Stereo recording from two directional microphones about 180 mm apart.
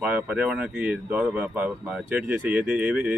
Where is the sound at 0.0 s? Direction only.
5° right (ahead or behind).